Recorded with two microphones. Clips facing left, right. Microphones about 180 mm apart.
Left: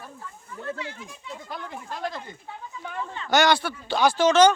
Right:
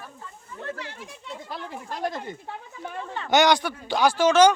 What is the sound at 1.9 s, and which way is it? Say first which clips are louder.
Speech: right 3 dB; 45° right (ahead or behind).